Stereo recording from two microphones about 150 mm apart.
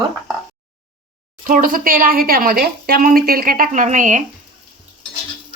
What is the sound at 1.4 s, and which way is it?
A woman's voice, 65° right (ahead or behind).